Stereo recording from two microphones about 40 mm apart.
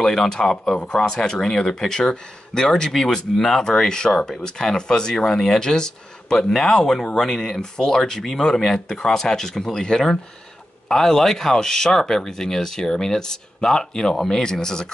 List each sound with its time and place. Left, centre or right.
0.0 s speech: centre